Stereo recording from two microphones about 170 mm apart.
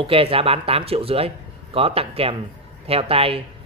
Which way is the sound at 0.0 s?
35° right (ahead or behind).